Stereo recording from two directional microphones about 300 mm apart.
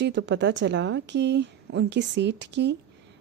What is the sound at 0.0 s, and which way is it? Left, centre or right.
A woman's voice, right.